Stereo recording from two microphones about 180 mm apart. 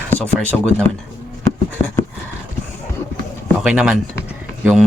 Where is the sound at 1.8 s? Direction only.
35° left (ahead or behind).